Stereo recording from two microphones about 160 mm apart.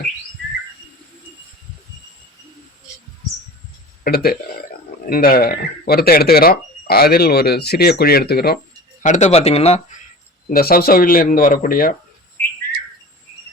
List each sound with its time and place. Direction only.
4.0 s speech: 75° left (ahead or behind)
9.0 s speech: 45° left (ahead or behind)
10.5 s speech: 70° left (ahead or behind)
12.4 s bird: 10° left (ahead or behind)